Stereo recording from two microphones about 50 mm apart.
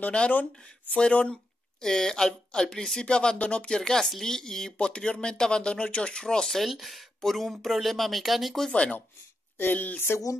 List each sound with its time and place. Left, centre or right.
0.0 s speech: left
6.6 s speech: centre
9.6 s speech: left
9.9 s a sound: left